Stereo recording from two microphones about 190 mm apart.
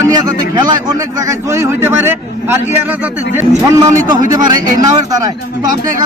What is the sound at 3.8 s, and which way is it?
A man's voice, 20° right (ahead or behind).